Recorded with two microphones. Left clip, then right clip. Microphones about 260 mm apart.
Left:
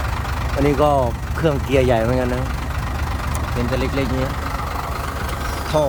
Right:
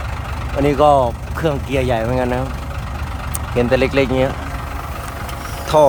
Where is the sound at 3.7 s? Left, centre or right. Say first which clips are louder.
Right 8 dB; centre.